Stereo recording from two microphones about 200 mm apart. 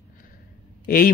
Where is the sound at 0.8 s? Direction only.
45° left (ahead or behind).